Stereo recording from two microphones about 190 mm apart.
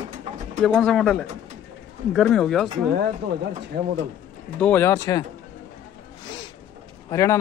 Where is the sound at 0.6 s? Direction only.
Centre (ahead or behind).